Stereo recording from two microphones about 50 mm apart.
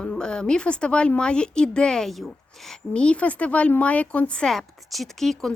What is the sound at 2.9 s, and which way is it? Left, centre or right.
Speech, left.